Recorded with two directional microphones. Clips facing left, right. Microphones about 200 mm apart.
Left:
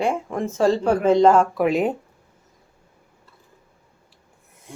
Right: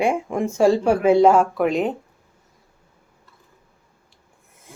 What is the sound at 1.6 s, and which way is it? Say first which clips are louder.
Speech: left 1 dB; 5° left (ahead or behind).